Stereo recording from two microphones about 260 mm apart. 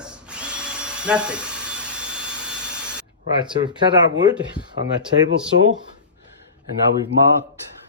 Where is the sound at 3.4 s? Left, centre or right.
Centre.